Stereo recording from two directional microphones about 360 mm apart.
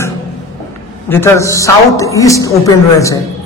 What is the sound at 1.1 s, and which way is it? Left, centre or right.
A woman's voice, centre.